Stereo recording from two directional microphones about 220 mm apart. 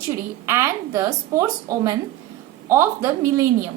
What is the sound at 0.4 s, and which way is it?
A woman's voice, 15° right (ahead or behind).